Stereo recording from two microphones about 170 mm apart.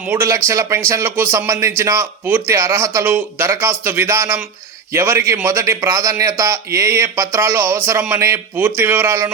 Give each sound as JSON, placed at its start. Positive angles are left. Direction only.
{"t": 0.0, "sound": "a man's voice", "side_deg": -15}